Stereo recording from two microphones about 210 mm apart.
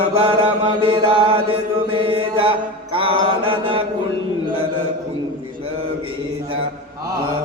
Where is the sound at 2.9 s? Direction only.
25° right (ahead or behind).